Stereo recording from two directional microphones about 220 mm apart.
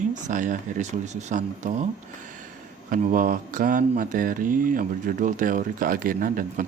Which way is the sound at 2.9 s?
40° right (ahead or behind).